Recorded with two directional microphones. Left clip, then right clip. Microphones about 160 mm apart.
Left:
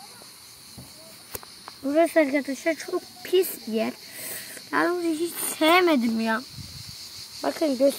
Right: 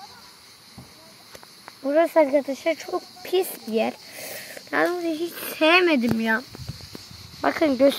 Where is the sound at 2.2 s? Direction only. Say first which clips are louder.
Right 3 dB; centre (ahead or behind).